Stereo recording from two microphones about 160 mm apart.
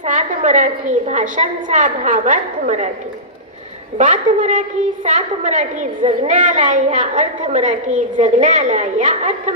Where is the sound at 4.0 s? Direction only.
55° right (ahead or behind).